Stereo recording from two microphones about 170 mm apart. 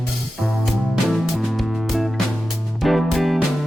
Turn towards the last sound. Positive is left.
turn(degrees=0)  # may be behind; listen again after turning